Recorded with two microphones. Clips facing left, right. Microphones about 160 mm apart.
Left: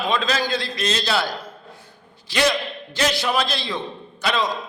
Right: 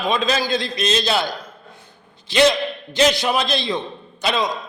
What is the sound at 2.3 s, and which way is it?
A man's voice, 20° right (ahead or behind).